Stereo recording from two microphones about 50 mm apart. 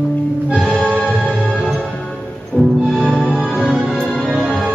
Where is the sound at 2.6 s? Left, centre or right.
Left.